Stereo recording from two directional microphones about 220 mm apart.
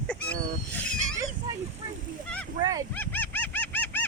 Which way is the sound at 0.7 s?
5° left (ahead or behind).